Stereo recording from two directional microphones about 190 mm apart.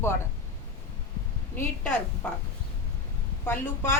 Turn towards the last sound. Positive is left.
turn(degrees=10)  # may be behind; listen again after turning